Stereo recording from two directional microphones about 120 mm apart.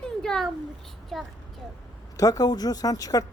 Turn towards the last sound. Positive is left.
turn(degrees=30)  # may be behind; listen again after turning